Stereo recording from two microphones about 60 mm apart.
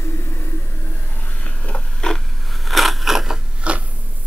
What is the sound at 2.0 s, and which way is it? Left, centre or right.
Scissors, centre.